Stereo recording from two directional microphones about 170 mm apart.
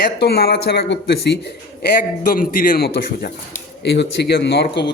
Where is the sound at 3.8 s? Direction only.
80° left.